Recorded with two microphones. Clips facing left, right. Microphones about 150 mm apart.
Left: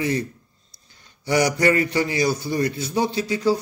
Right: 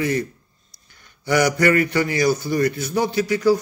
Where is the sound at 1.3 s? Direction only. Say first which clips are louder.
Right 1 dB; 30° left (ahead or behind).